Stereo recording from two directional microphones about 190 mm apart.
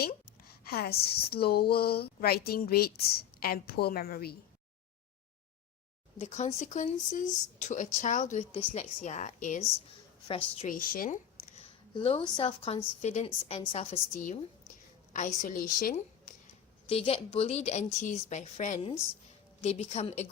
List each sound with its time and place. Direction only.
0.6 s a woman's voice: 55° left (ahead or behind)
6.1 s speech: 35° left (ahead or behind)
10.2 s a woman's voice: 30° left (ahead or behind)
10.7 s speech: 50° left (ahead or behind); by 14.0 s 30° left (ahead or behind)
15.1 s a woman's voice: 40° left (ahead or behind)
16.9 s speech: 30° left (ahead or behind)